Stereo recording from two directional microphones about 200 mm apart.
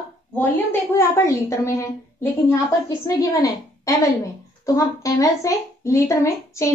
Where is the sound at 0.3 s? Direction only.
10° left (ahead or behind).